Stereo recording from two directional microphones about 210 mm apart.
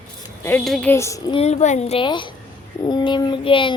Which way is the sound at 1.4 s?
30° left (ahead or behind).